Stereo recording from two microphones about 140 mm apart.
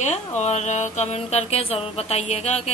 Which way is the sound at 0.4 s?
55° left (ahead or behind).